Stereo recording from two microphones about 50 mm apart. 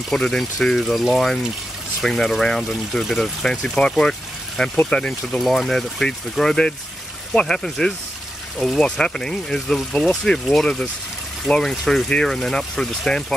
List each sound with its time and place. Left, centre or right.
0.1 s speech: centre
4.9 s speech: left
5.4 s speech: centre